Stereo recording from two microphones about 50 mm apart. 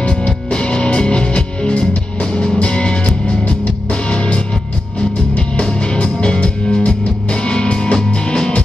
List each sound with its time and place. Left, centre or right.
0.0 s music: left